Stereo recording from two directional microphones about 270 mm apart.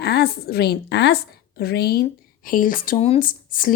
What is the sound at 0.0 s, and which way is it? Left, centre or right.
A woman's voice, left.